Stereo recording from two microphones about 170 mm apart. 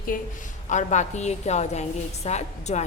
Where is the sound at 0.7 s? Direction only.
45° left (ahead or behind).